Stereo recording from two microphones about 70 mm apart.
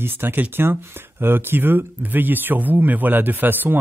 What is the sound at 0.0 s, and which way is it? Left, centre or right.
Speech, right.